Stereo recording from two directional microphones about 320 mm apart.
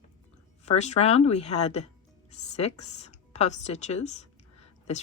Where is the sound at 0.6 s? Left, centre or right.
Left.